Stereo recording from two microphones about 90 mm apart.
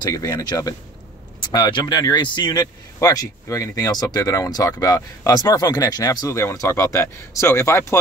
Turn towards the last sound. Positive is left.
turn(degrees=30)  # may be behind; listen again after turning